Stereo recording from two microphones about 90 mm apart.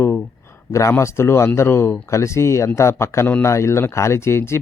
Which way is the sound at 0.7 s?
35° left (ahead or behind).